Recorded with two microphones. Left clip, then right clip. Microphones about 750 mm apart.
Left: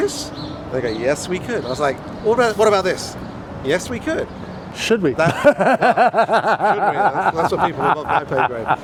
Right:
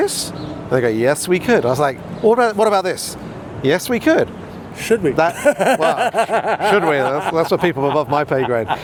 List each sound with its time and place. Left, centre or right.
0.7 s speech: right
4.8 s a sound: left
7.3 s speech: right